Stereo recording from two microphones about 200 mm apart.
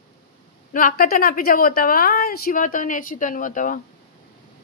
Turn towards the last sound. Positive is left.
turn(degrees=40)  # may be behind; listen again after turning